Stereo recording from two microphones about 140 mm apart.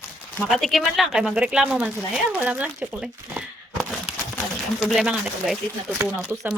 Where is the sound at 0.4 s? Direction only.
Centre (ahead or behind).